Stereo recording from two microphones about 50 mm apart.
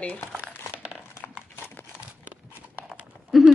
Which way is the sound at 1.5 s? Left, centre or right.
Left.